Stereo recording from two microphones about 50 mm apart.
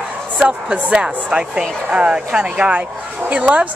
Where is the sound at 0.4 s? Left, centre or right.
Right.